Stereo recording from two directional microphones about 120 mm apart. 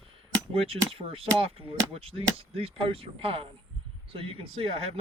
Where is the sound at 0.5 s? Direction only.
50° right (ahead or behind).